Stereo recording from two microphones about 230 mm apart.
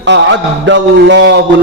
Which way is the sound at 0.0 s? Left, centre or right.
Right.